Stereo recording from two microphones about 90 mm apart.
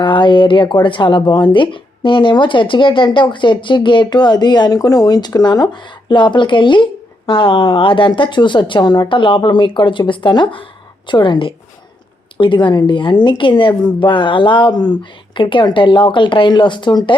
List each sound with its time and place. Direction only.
0.0 s speech: 65° left (ahead or behind)
15.4 s speech: 65° left (ahead or behind)